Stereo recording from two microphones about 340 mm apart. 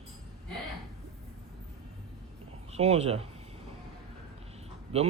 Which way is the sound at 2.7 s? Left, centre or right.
Centre.